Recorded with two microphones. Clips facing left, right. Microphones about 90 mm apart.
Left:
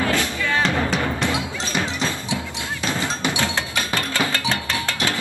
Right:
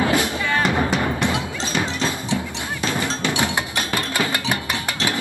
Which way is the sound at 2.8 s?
15° right (ahead or behind).